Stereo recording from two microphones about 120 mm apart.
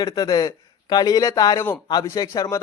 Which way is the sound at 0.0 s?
35° left (ahead or behind).